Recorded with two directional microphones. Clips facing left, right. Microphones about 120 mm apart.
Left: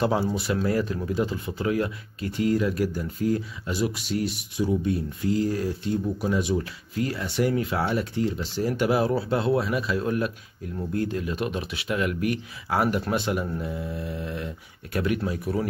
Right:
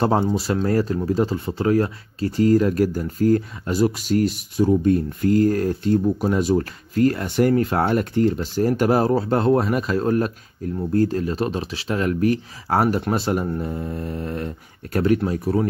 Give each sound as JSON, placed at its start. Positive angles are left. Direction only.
{"t": 0.2, "sound": "speech", "side_deg": -30}